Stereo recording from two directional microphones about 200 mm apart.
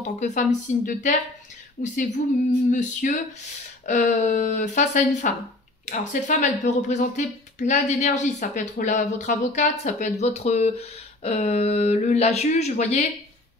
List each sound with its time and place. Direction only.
0.0 s speech: 35° left (ahead or behind)